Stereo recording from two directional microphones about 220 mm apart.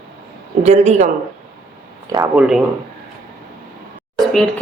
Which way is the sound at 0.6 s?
30° right (ahead or behind).